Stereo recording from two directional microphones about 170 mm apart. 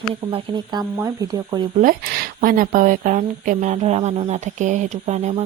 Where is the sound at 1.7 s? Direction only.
55° right (ahead or behind).